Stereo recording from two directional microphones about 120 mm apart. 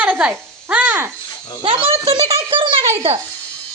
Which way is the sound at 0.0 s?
10° right (ahead or behind).